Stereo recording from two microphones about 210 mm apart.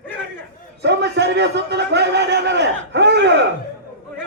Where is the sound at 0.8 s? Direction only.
55° right (ahead or behind).